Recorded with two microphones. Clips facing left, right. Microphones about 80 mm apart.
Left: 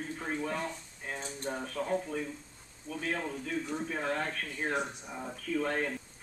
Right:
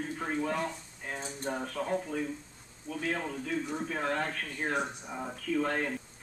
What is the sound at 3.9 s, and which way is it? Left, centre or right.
Speech, centre.